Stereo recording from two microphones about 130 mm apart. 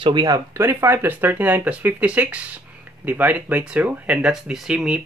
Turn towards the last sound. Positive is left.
turn(degrees=-5)  # may be behind; listen again after turning